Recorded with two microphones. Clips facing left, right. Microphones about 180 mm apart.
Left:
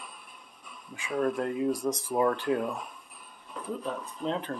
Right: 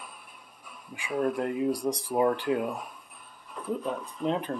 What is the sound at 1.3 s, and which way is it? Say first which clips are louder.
Speech: right 1 dB; 20° right (ahead or behind).